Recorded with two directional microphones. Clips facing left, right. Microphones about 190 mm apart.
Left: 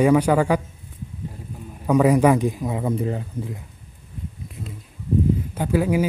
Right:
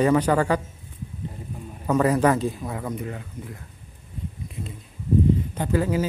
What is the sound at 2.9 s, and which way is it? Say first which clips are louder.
Speech: left 7 dB; 30° left (ahead or behind).